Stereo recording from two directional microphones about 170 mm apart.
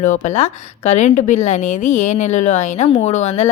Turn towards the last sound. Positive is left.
turn(degrees=40)  # may be behind; listen again after turning